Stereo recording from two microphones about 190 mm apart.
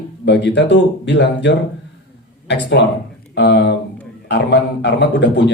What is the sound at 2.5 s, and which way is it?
Speech, 65° left (ahead or behind).